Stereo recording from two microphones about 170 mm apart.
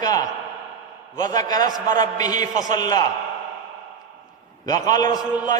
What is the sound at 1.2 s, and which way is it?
A man's voice, 25° left (ahead or behind).